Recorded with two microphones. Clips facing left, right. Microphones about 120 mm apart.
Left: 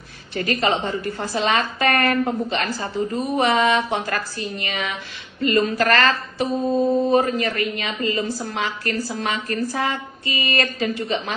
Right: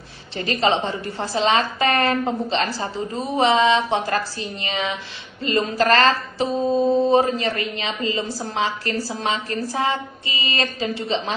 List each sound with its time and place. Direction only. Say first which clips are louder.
0.3 s a woman's voice: right 1 dB; 25° right (ahead or behind)